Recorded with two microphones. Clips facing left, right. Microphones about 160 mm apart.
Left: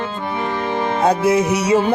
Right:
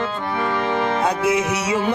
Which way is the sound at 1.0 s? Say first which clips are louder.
Left 4 dB; 35° left (ahead or behind).